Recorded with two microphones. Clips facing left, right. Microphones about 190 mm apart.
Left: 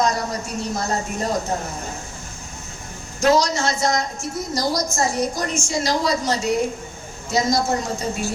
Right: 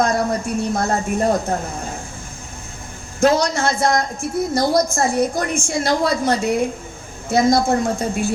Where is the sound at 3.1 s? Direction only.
55° right (ahead or behind).